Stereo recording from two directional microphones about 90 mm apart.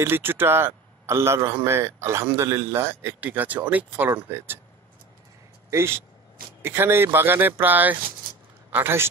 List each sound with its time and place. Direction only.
0.0 s a man's voice: 25° right (ahead or behind)
5.7 s a man's voice: 30° right (ahead or behind)